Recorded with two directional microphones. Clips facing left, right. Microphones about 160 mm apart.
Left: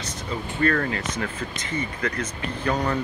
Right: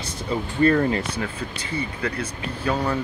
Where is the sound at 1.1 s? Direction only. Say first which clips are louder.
Right 1 dB; 10° right (ahead or behind).